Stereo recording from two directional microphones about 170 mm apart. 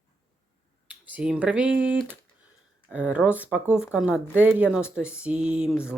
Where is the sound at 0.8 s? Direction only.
5° right (ahead or behind).